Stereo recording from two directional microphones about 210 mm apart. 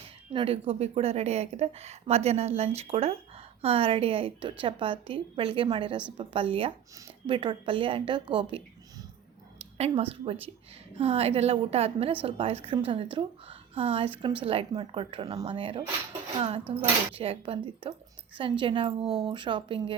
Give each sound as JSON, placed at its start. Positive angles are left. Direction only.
{"t": 0.3, "sound": "a woman's voice", "side_deg": -25}
{"t": 9.7, "sound": "a woman's voice", "side_deg": -30}
{"t": 17.2, "sound": "a woman's voice", "side_deg": -25}
{"t": 19.0, "sound": "speech", "side_deg": -5}
{"t": 19.3, "sound": "a woman's voice", "side_deg": -20}